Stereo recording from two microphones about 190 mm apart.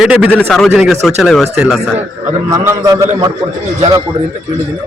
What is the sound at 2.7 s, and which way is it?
Speech, 20° right (ahead or behind).